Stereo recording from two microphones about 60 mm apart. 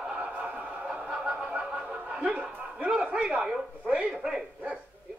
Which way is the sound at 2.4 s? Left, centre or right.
Centre.